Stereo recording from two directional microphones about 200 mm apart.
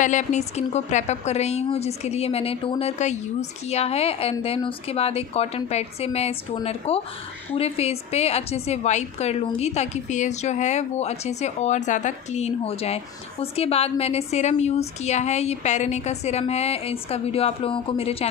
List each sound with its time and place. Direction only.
0.0 s a woman's voice: 35° left (ahead or behind)